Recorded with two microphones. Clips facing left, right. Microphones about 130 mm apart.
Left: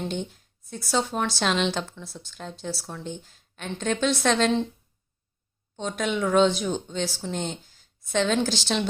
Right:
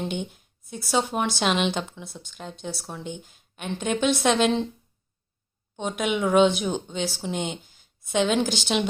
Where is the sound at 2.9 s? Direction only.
10° right (ahead or behind).